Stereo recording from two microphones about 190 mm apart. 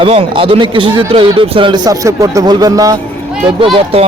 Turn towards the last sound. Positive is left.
turn(degrees=-30)  # may be behind; listen again after turning